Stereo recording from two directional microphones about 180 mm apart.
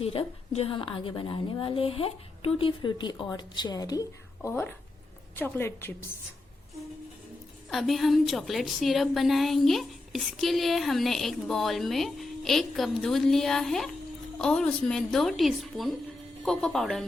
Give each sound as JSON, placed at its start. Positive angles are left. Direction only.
{"t": 0.0, "sound": "a woman's voice", "side_deg": 30}
{"t": 7.7, "sound": "a woman's voice", "side_deg": 0}